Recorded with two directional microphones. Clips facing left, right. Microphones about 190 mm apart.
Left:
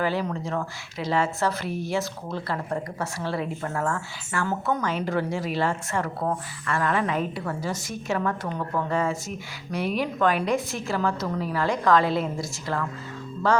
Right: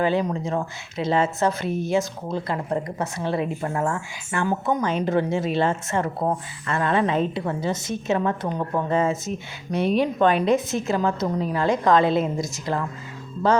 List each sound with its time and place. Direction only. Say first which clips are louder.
0.0 s speech: right 4 dB; 20° right (ahead or behind)